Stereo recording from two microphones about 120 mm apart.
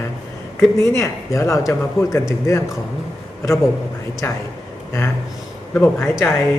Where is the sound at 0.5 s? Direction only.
25° left (ahead or behind).